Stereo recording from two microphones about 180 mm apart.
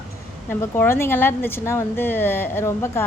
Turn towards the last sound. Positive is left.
turn(degrees=15)  # may be behind; listen again after turning